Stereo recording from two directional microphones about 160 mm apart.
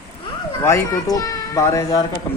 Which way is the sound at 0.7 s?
20° left (ahead or behind).